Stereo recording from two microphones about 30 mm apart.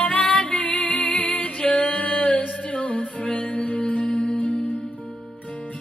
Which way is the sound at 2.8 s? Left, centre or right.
Left.